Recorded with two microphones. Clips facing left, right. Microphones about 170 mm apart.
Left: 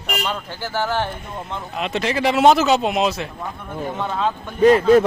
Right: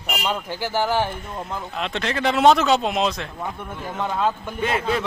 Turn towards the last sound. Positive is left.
turn(degrees=40)  # may be behind; listen again after turning